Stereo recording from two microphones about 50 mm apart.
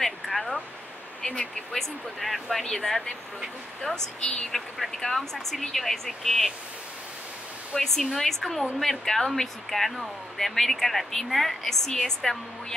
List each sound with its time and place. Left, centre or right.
0.0 s a sound: centre
1.2 s speech: left
1.7 s speech: centre
7.7 s speech: centre